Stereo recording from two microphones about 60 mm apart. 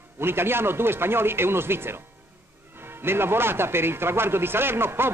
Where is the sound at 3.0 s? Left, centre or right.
Right.